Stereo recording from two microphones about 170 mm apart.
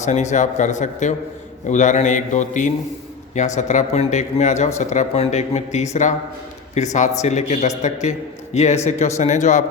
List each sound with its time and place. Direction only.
0.0 s speech: 45° left (ahead or behind)